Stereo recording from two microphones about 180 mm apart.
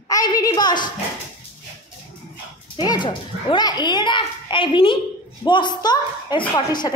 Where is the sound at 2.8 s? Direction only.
25° left (ahead or behind).